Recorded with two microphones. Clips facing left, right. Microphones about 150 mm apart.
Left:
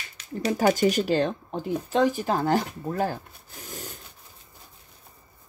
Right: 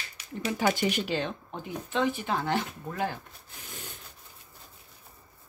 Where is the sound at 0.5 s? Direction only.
40° left (ahead or behind).